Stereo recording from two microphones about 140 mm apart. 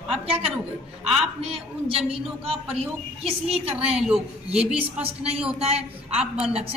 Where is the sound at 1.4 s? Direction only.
45° right (ahead or behind).